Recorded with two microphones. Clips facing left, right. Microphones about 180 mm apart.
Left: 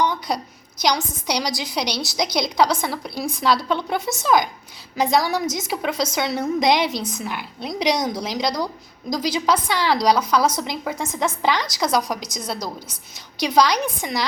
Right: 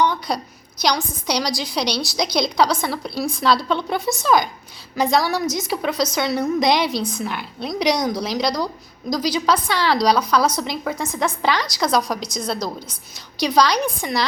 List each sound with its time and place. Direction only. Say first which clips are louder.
0.3 s a woman's voice: right 1 dB; 20° left (ahead or behind)